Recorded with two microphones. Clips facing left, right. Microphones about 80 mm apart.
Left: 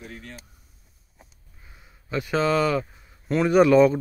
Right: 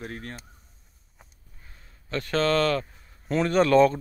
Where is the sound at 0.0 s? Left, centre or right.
Right.